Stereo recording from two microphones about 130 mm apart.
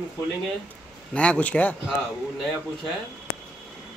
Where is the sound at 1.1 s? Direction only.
10° left (ahead or behind).